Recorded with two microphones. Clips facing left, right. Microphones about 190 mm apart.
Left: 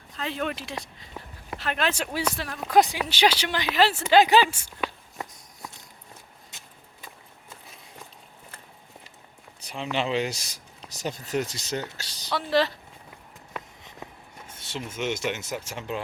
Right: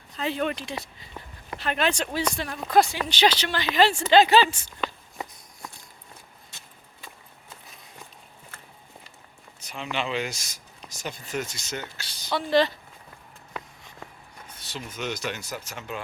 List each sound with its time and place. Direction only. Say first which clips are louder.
0.1 s speech: right 3 dB; centre (ahead or behind)
2.7 s speech: even; 15° left (ahead or behind)
3.8 s speech: right 1 dB; 5° left (ahead or behind)
9.6 s speech: left 2 dB; 30° left (ahead or behind)
12.3 s a sound: right 2 dB; centre (ahead or behind)
13.8 s a sound: left 2 dB; 25° left (ahead or behind)